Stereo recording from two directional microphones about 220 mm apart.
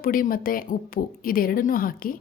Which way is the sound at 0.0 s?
40° left (ahead or behind).